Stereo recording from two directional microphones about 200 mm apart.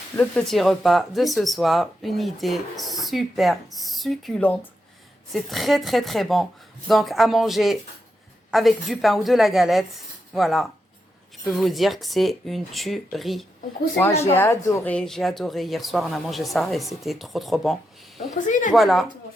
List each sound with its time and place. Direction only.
0.2 s speech: 5° left (ahead or behind)
14.2 s speech: 10° left (ahead or behind)
18.3 s speech: 40° left (ahead or behind)
18.7 s speech: centre (ahead or behind)